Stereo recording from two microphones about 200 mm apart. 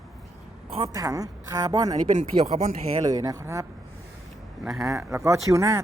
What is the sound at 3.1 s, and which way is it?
Speech, 15° right (ahead or behind).